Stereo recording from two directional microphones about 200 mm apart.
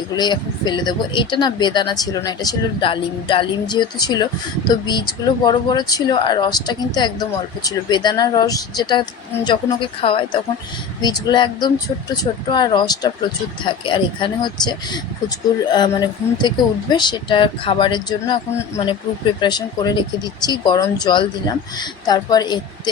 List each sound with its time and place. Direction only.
0.2 s speech: 20° left (ahead or behind)
19.4 s speech: 20° left (ahead or behind)